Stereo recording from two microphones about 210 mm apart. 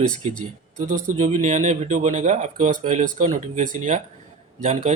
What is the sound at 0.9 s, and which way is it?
Speech, 40° right (ahead or behind).